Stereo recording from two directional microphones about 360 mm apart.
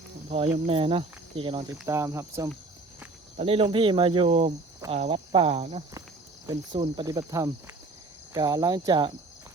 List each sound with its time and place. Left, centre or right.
0.3 s speech: centre